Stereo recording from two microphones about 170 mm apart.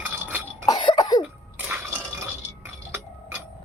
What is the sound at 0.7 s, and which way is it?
Cough, 25° left (ahead or behind).